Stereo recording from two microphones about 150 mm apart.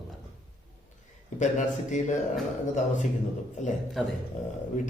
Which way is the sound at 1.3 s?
55° left (ahead or behind).